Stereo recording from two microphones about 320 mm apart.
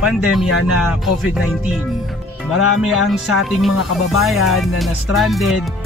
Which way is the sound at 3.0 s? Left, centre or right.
Centre.